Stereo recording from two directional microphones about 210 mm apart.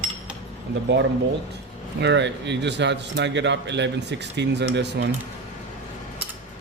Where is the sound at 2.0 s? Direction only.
55° right (ahead or behind).